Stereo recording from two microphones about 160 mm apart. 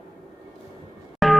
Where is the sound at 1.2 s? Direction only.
Centre (ahead or behind).